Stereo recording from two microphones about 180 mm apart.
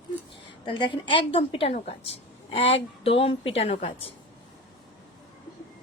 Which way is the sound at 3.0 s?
35° left (ahead or behind).